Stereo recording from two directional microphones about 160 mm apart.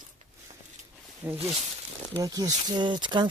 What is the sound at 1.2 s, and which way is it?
Speech, 10° right (ahead or behind).